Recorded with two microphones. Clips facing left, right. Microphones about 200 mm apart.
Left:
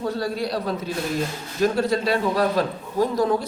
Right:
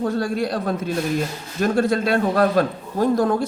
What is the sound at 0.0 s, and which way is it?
A man's voice, 50° right (ahead or behind).